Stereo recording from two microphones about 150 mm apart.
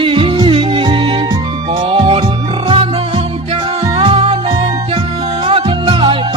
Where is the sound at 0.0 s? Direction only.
35° right (ahead or behind).